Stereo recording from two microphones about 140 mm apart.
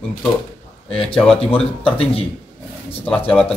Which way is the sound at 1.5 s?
40° left (ahead or behind).